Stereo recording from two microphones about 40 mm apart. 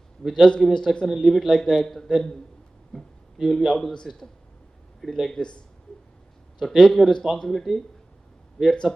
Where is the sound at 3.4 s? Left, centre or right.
Centre.